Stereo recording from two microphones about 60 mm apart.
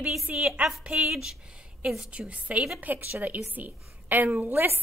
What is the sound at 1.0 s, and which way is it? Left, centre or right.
Speech, centre.